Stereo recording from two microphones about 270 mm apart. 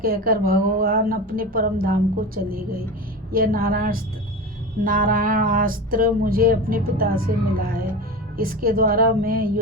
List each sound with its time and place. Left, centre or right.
0.0 s a woman's voice: right